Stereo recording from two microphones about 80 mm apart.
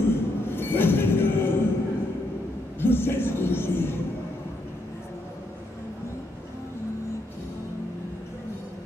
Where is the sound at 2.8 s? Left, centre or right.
Left.